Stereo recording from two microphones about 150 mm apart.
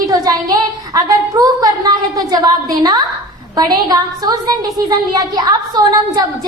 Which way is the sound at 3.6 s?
25° right (ahead or behind).